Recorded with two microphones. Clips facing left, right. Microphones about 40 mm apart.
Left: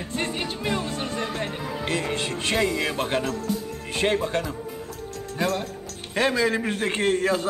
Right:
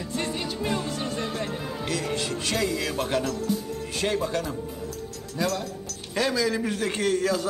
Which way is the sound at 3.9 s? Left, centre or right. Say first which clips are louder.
Left 3 dB; left.